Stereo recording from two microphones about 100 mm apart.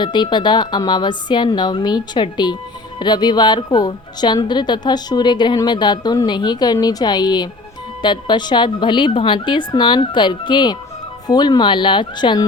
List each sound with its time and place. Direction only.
0.0 s speech: 50° left (ahead or behind)